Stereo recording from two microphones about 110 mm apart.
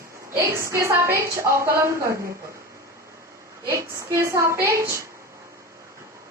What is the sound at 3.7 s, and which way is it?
A woman's voice, 25° right (ahead or behind).